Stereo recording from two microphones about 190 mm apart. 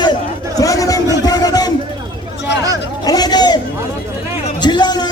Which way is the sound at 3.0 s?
20° left (ahead or behind).